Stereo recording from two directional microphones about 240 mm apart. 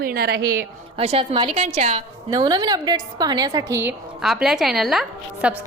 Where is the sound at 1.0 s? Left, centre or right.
Right.